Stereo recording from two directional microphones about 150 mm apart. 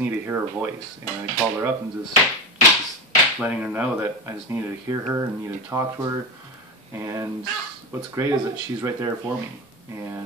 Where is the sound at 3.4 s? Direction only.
10° right (ahead or behind).